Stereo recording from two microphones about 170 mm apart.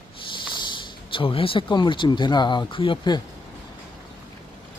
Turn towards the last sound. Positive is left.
turn(degrees=30)  # may be behind; listen again after turning